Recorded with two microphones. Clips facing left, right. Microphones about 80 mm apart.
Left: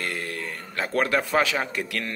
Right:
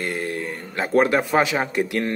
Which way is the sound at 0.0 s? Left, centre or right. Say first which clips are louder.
Right 5 dB; right.